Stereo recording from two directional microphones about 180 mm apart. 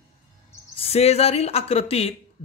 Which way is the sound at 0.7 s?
35° left (ahead or behind).